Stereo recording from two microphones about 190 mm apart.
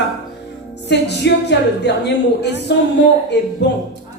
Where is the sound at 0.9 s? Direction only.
65° left (ahead or behind).